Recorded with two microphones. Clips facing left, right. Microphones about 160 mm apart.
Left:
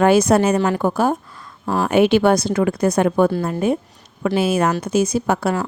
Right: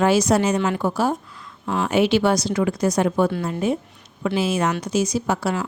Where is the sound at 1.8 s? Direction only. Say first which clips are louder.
Left 4 dB; 55° left (ahead or behind).